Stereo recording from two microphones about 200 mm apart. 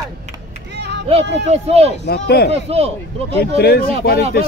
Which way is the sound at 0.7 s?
60° right (ahead or behind).